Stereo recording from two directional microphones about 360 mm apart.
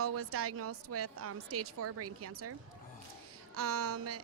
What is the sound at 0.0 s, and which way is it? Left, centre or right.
A woman's voice, right.